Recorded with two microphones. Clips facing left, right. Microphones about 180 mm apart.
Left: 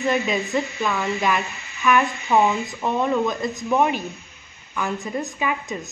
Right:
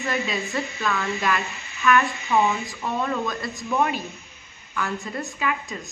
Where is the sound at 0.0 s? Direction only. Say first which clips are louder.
Left 5 dB; 20° left (ahead or behind).